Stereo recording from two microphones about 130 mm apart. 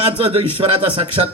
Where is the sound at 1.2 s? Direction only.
40° right (ahead or behind).